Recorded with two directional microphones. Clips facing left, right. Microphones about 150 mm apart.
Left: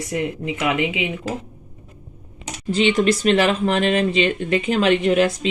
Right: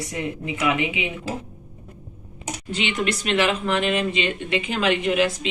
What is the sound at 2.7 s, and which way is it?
Speech, 35° left (ahead or behind).